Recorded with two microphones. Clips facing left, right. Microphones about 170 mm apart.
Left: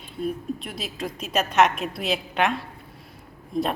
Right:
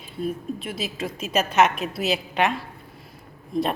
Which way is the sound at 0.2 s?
Centre (ahead or behind).